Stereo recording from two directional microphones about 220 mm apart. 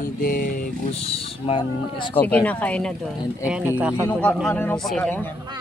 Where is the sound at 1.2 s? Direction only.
25° left (ahead or behind).